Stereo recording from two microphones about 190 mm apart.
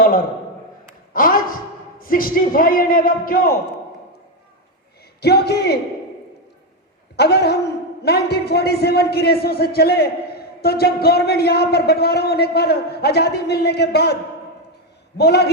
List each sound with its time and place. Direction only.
1.1 s speech: 45° left (ahead or behind)
5.2 s a man's voice: 60° left (ahead or behind)
7.2 s a man's voice: 60° left (ahead or behind)
15.2 s a man's voice: 60° left (ahead or behind)